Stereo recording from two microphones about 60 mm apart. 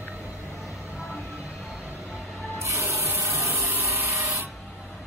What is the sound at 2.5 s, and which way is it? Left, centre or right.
Rub, right.